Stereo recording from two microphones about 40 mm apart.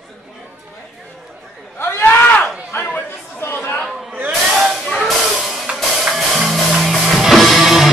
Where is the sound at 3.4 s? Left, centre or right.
Left.